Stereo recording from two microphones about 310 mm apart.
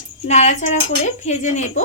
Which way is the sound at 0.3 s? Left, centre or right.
Left.